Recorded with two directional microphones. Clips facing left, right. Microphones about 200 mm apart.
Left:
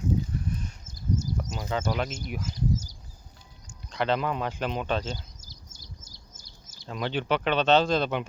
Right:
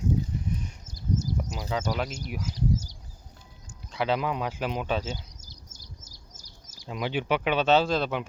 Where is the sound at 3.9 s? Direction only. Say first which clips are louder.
Even; 5° right (ahead or behind).